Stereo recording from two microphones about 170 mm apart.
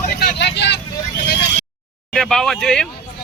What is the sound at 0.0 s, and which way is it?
Vehicle, 60° left (ahead or behind).